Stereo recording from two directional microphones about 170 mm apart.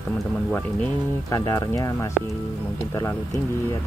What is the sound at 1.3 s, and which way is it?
Speech, 20° left (ahead or behind).